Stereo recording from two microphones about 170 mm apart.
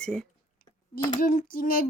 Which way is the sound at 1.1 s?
50° left (ahead or behind).